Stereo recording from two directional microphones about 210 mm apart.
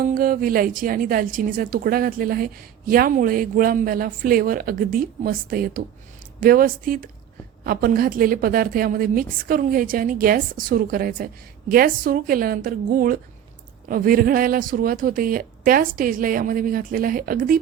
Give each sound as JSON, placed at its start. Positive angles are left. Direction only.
{"t": 0.0, "sound": "a woman's voice", "side_deg": -40}